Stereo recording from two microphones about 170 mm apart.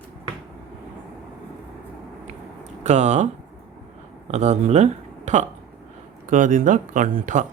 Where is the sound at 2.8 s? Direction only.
40° right (ahead or behind).